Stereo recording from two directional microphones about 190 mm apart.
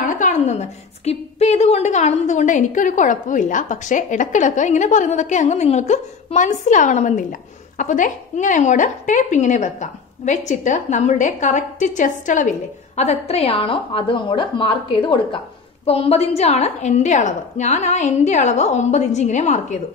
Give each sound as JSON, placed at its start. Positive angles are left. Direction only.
{"t": 0.0, "sound": "a woman's voice", "side_deg": 40}